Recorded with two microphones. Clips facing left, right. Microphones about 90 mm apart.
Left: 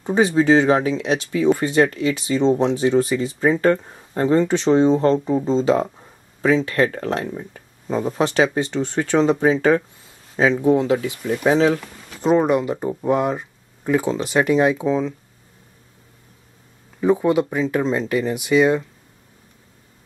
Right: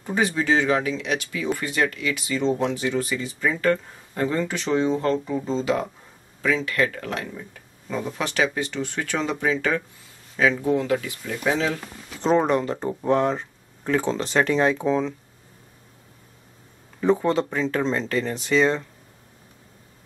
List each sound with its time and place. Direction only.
0.0 s speech: 30° left (ahead or behind)
12.2 s speech: 5° left (ahead or behind)
17.0 s speech: 10° left (ahead or behind)